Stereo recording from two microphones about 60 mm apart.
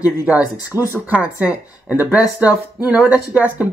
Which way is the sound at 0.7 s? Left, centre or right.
Right.